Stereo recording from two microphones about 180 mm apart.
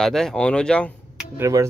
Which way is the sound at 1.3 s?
15° right (ahead or behind).